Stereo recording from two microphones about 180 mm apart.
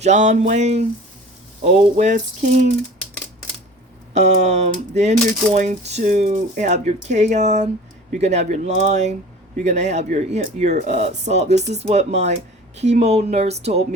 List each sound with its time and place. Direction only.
0.0 s speech: 40° right (ahead or behind)
1.6 s sizzle: 40° right (ahead or behind)
4.1 s speech: 40° right (ahead or behind)